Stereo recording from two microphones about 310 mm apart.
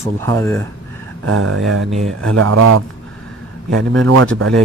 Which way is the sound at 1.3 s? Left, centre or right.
Right.